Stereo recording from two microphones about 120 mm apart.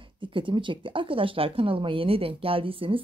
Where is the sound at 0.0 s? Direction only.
45° right (ahead or behind).